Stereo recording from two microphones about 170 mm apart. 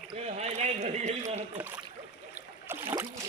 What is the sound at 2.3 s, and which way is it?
Boat, 15° right (ahead or behind).